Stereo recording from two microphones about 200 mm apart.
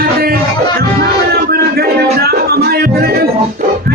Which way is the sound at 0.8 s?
50° right (ahead or behind).